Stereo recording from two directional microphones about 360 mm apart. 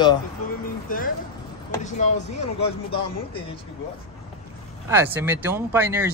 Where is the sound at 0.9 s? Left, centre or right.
Left.